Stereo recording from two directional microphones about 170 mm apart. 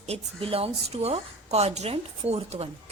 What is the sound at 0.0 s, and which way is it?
A woman's voice, 35° right (ahead or behind).